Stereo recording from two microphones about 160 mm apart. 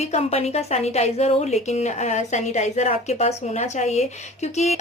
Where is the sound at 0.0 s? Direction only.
40° left (ahead or behind).